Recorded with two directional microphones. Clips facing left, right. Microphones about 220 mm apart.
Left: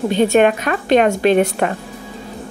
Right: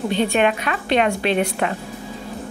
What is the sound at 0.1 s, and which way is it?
A woman's voice, 45° left (ahead or behind).